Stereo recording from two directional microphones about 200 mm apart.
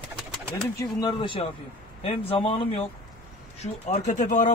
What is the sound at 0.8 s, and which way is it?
Speech, 20° left (ahead or behind).